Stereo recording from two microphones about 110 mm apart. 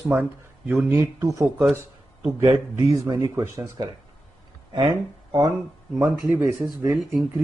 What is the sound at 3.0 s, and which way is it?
Speech, 30° right (ahead or behind).